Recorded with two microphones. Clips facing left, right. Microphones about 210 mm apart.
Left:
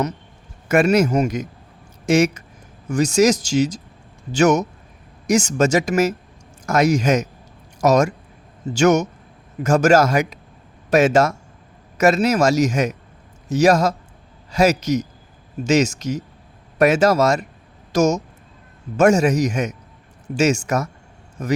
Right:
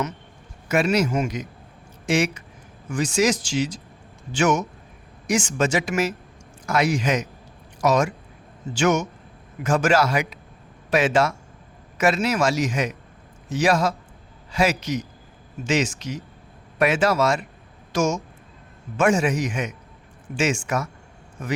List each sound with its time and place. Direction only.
0.7 s a man's voice: 50° left (ahead or behind)